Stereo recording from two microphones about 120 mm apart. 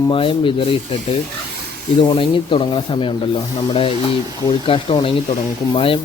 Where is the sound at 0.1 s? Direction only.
45° left (ahead or behind).